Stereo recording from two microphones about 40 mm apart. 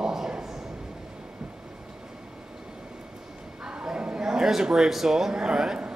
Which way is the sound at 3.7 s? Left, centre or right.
Right.